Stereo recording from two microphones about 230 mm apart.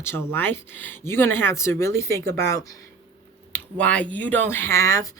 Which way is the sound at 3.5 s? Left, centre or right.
Centre.